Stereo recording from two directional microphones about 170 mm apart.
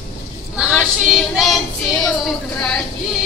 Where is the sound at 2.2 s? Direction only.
5° left (ahead or behind).